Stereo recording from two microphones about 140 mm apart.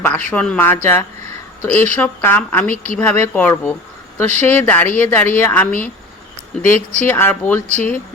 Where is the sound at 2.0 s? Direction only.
15° left (ahead or behind).